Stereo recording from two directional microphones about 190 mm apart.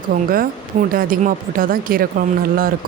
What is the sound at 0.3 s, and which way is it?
Speech, 50° right (ahead or behind).